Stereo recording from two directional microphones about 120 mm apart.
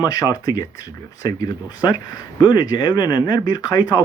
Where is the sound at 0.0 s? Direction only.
30° left (ahead or behind).